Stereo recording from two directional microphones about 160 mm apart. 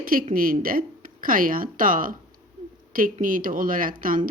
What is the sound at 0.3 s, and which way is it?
Speech, 60° right (ahead or behind).